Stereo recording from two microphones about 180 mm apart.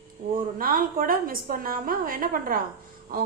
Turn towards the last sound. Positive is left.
turn(degrees=-55)  # may be behind; listen again after turning